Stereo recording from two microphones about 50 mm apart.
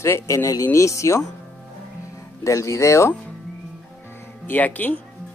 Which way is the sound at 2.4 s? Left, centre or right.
Left.